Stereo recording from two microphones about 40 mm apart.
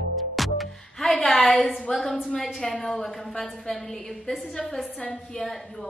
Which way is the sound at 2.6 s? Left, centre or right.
Centre.